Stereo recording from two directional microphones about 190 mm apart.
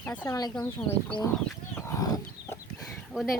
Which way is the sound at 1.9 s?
20° left (ahead or behind).